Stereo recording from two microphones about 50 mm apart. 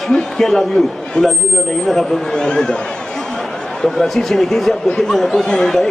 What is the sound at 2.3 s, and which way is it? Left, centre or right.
Speech, centre.